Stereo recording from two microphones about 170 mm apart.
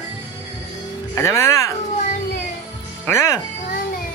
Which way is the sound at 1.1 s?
15° left (ahead or behind).